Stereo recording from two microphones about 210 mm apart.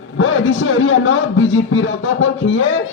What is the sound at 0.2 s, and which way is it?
A man's voice, 65° left (ahead or behind).